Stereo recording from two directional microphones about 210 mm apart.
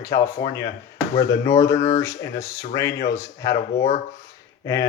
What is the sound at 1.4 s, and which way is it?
Speech, 15° left (ahead or behind).